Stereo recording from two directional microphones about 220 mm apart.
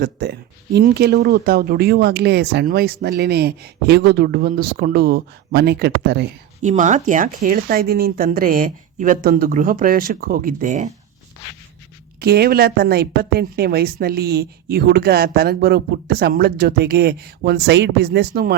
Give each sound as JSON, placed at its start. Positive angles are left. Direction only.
{"t": 0.0, "sound": "a woman's voice", "side_deg": -50}
{"t": 6.6, "sound": "speech", "side_deg": -35}
{"t": 12.2, "sound": "a woman's voice", "side_deg": -45}